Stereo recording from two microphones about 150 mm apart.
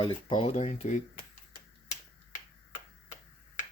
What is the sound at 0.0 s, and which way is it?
Speech, 35° left (ahead or behind).